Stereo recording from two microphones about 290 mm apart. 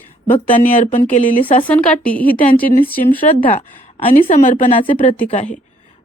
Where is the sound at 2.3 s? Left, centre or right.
Left.